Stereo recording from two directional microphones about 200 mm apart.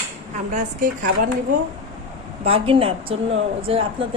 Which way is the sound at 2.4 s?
30° right (ahead or behind).